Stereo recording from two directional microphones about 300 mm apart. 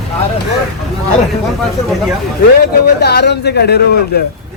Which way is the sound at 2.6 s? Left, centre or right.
Left.